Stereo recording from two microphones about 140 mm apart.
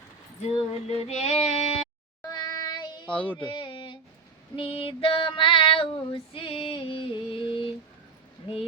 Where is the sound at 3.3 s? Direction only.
35° left (ahead or behind).